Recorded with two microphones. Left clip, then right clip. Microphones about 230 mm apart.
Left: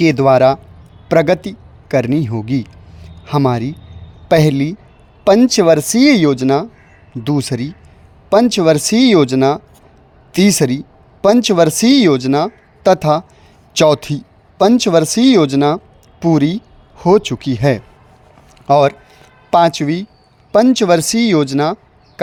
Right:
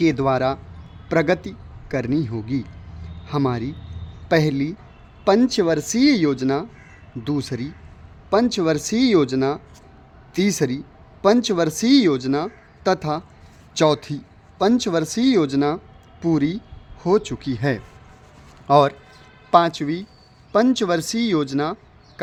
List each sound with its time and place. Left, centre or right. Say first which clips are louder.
0.0 s a man's voice: left 9 dB; left